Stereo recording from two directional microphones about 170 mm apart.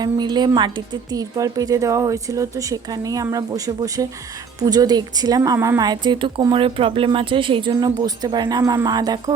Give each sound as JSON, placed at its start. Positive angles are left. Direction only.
{"t": 0.0, "sound": "a woman's voice", "side_deg": -25}